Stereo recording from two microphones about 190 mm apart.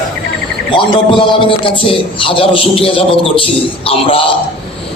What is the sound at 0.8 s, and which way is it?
A man's voice, 25° left (ahead or behind).